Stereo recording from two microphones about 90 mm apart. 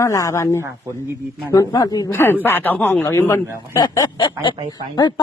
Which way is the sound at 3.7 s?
45° left (ahead or behind).